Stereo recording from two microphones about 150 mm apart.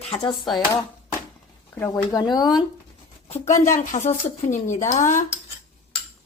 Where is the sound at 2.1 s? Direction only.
25° left (ahead or behind).